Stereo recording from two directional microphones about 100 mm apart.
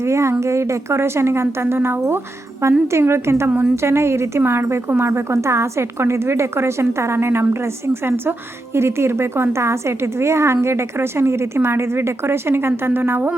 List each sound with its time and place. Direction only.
0.0 s a woman's voice: 30° right (ahead or behind)